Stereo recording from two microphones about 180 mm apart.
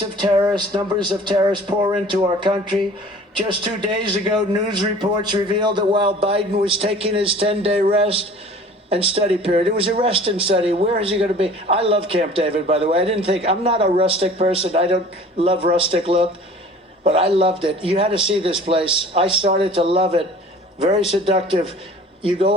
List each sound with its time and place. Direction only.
0.2 s a man's voice: 25° right (ahead or behind)